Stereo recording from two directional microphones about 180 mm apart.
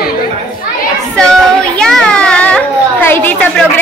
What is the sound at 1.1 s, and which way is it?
A child's voice, 5° left (ahead or behind).